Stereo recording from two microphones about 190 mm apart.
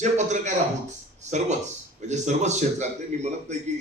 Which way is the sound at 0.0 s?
40° right (ahead or behind).